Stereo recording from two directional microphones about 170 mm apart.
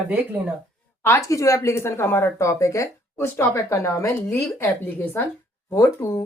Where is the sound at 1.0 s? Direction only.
15° left (ahead or behind).